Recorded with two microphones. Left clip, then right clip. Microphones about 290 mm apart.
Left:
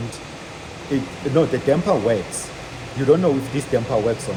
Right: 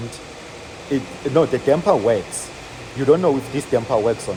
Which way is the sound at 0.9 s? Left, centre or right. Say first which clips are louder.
Right 1 dB; centre.